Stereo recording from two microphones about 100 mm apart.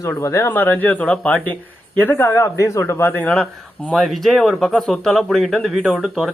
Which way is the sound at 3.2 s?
10° left (ahead or behind).